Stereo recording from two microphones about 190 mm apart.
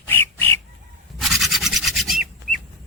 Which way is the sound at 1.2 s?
Centre (ahead or behind).